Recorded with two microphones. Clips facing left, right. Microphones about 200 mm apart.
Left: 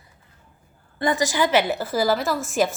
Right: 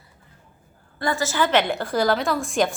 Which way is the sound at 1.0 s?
15° left (ahead or behind).